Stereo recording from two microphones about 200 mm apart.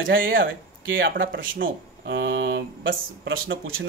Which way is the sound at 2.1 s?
60° right (ahead or behind).